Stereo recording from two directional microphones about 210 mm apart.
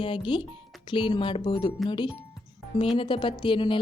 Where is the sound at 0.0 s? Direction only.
25° left (ahead or behind).